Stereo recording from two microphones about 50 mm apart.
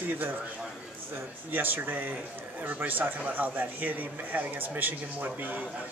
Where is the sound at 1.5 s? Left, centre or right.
Right.